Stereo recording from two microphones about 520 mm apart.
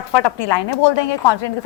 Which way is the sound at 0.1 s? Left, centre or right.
Left.